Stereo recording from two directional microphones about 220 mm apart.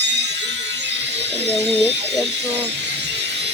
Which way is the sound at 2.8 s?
50° right (ahead or behind).